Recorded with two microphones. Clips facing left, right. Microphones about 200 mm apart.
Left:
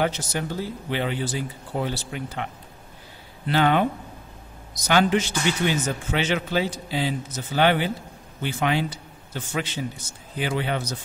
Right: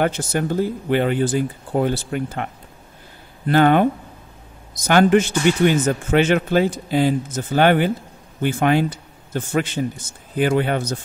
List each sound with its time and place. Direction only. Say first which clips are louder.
0.0 s speech: right 5 dB; 50° right (ahead or behind)